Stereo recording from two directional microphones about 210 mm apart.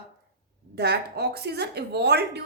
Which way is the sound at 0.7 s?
50° right (ahead or behind).